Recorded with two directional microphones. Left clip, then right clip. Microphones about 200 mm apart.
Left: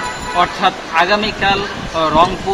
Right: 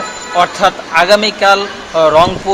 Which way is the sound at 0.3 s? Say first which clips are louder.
Right 4 dB; 50° right (ahead or behind).